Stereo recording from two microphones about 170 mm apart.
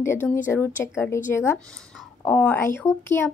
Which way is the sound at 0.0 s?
15° left (ahead or behind).